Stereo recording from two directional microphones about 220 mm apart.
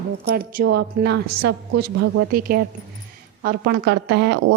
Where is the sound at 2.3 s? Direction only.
45° right (ahead or behind).